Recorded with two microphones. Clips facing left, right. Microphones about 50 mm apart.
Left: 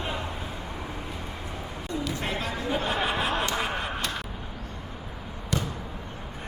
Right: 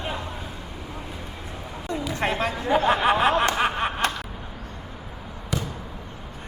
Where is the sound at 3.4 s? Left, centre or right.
Right.